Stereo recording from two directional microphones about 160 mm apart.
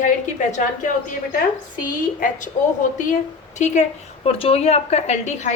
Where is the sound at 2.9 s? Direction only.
55° left (ahead or behind).